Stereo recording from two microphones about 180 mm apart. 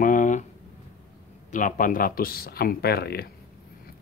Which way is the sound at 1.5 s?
45° left (ahead or behind).